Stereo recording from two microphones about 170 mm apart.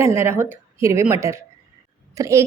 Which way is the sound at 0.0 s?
15° right (ahead or behind).